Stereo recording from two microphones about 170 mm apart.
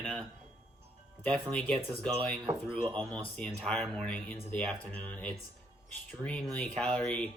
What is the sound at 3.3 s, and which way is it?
Speech, 5° left (ahead or behind).